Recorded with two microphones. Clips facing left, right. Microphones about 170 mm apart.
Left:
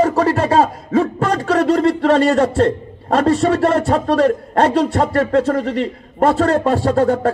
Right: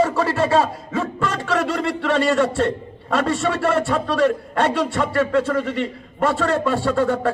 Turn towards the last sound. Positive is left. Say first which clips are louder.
# left 4 dB
turn(degrees=40)  # may be behind; listen again after turning